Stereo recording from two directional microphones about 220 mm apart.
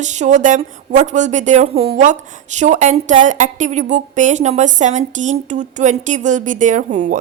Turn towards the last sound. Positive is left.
turn(degrees=-35)  # may be behind; listen again after turning